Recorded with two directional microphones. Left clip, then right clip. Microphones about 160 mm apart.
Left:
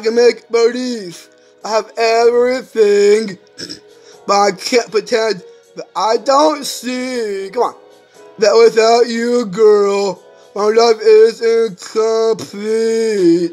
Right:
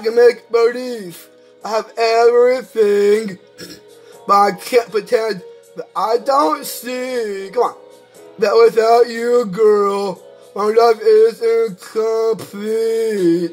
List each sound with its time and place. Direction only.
0.0 s speech: 20° left (ahead or behind)
3.5 s music: 50° right (ahead or behind)
4.3 s speech: 20° left (ahead or behind)